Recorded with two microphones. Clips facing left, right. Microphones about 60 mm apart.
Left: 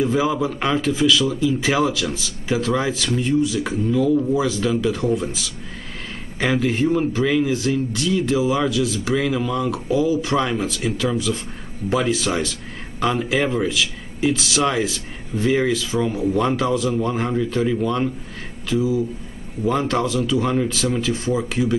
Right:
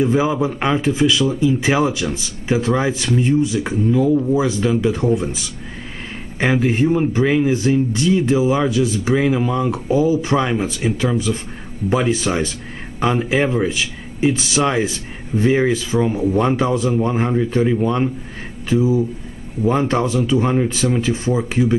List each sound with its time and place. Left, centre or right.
0.0 s speech: right
6.4 s speech: right
10.3 s speech: centre